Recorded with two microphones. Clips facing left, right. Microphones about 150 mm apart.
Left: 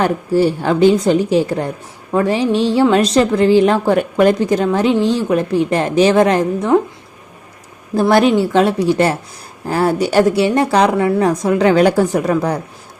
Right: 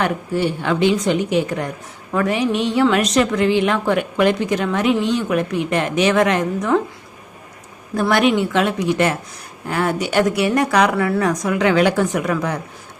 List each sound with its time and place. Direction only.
0.0 s a woman's voice: 35° left (ahead or behind)
8.1 s a woman's voice: 35° left (ahead or behind)